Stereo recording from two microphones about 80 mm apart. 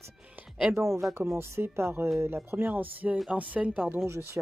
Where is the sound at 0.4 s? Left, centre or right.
Centre.